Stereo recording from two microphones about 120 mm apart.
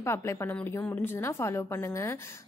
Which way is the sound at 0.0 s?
20° left (ahead or behind).